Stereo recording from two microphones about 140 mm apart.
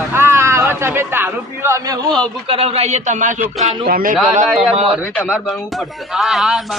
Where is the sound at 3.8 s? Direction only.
85° right.